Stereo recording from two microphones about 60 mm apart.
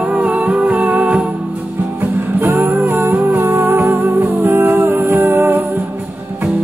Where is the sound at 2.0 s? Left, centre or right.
Right.